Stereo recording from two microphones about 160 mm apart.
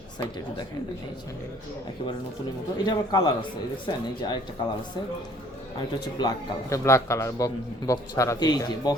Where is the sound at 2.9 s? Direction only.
25° left (ahead or behind).